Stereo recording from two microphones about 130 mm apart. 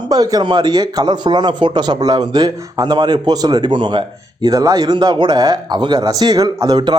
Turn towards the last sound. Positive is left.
turn(degrees=-35)  # may be behind; listen again after turning